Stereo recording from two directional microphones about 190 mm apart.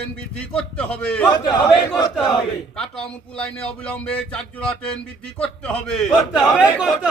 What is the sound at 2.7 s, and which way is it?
A man's voice, 5° left (ahead or behind).